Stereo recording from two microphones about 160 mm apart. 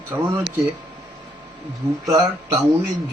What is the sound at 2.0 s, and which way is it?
Speech, 20° right (ahead or behind).